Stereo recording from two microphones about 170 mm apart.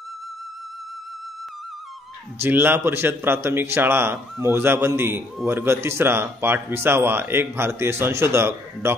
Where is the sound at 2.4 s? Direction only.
10° right (ahead or behind).